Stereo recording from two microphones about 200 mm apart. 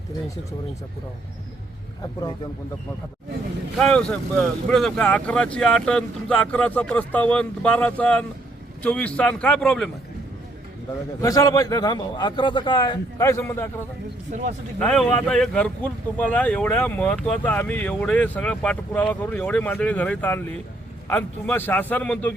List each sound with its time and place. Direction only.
3.8 s speech: 5° left (ahead or behind)
11.2 s a man's voice: 15° left (ahead or behind)
14.3 s speech: 35° right (ahead or behind)
14.8 s speech: 5° left (ahead or behind)